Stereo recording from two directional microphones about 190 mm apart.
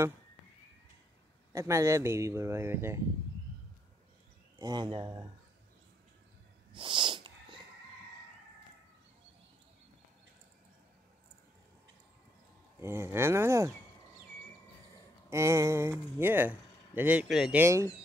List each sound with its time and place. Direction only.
1.5 s speech: 15° right (ahead or behind)
4.6 s speech: 20° right (ahead or behind)
6.7 s a sound: 25° right (ahead or behind)
12.8 s speech: 15° right (ahead or behind)
15.2 s speech: 15° right (ahead or behind)